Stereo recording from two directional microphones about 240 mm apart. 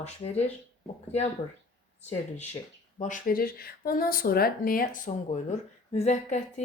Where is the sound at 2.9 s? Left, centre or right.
Left.